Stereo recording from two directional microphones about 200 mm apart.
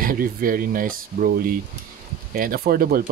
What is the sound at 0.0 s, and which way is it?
Speech, 45° right (ahead or behind).